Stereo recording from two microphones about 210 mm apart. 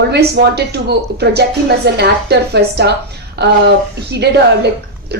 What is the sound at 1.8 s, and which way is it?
A woman's voice, 50° right (ahead or behind).